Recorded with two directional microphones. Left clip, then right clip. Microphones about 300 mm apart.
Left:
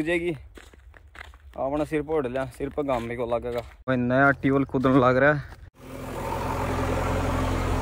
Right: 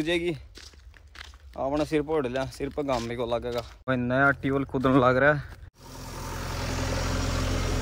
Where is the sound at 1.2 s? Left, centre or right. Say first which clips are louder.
Left 2 dB; centre.